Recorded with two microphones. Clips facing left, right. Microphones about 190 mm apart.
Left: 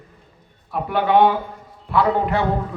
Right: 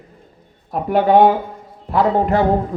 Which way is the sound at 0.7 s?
40° right (ahead or behind).